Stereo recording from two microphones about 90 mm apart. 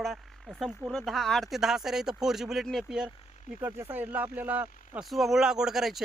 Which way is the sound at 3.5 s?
25° right (ahead or behind).